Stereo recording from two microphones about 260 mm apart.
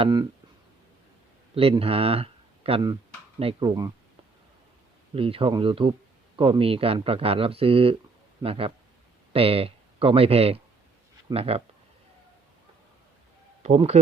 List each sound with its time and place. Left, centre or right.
0.0 s speech: centre
1.5 s speech: right
5.1 s speech: right
13.6 s speech: right